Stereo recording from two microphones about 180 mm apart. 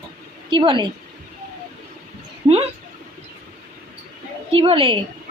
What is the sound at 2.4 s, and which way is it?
Speech, 35° right (ahead or behind).